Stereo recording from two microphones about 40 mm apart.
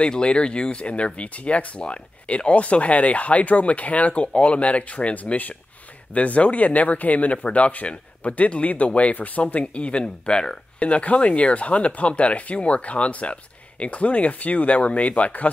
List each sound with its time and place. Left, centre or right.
0.0 s speech: left
10.8 s speech: left